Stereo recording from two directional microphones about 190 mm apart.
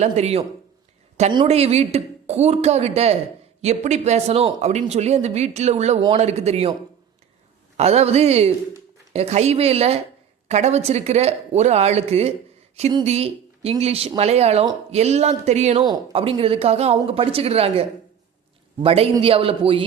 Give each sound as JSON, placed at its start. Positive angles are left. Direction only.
{"t": 0.0, "sound": "speech", "side_deg": -35}
{"t": 7.8, "sound": "a man's voice", "side_deg": -35}